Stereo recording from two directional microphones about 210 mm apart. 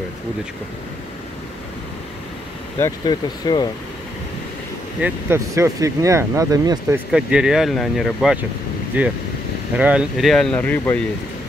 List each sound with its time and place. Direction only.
2.8 s speech: 20° left (ahead or behind)
5.0 s speech: 10° right (ahead or behind)
7.1 s speech: 5° right (ahead or behind)